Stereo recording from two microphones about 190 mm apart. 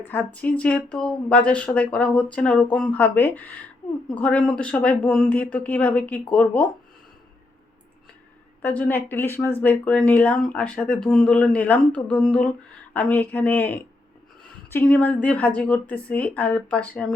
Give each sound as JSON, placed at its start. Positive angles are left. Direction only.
{"t": 0.0, "sound": "speech", "side_deg": 10}
{"t": 8.6, "sound": "speech", "side_deg": 10}